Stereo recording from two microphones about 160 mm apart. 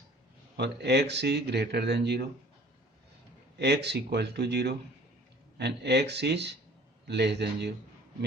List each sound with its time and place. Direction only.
0.5 s speech: 90° right
3.6 s speech: 90° right